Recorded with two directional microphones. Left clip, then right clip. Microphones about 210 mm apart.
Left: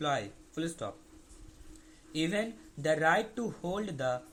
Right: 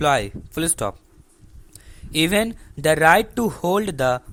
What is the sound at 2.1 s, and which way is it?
Speech, 35° right (ahead or behind).